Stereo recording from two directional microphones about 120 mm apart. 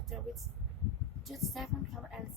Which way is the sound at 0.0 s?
Centre (ahead or behind).